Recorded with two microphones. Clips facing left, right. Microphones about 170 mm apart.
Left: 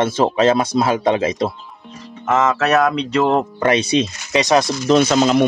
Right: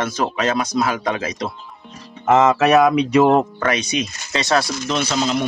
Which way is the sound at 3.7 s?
30° left (ahead or behind).